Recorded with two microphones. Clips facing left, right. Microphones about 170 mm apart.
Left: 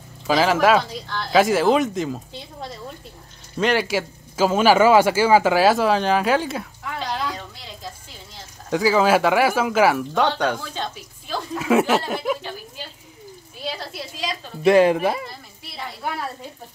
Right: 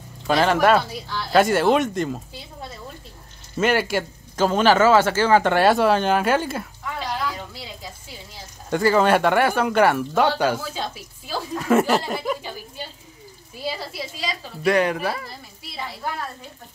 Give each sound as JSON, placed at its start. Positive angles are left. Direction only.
{"t": 0.3, "sound": "speech", "side_deg": 0}
{"t": 7.2, "sound": "a sound", "side_deg": -10}
{"t": 8.6, "sound": "speech", "side_deg": 0}
{"t": 11.5, "sound": "a sound", "side_deg": 5}
{"t": 13.7, "sound": "a woman's voice", "side_deg": -5}
{"t": 14.6, "sound": "speech", "side_deg": 25}